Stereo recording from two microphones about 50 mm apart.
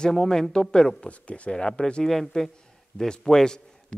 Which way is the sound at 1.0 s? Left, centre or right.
Left.